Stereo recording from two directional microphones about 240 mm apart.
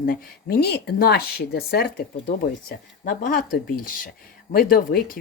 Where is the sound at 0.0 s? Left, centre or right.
Left.